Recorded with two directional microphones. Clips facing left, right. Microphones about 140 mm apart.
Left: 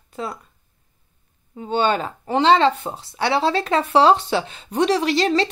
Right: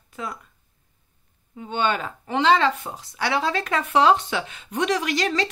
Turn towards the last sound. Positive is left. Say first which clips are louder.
# left 5 dB
turn(degrees=30)  # may be behind; listen again after turning